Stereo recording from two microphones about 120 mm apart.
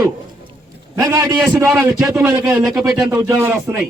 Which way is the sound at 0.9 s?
30° right (ahead or behind).